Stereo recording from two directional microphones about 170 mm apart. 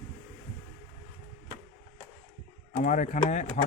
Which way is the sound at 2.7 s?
50° left (ahead or behind).